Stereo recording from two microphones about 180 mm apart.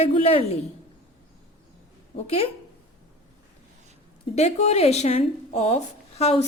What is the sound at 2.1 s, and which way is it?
Speech, 35° left (ahead or behind).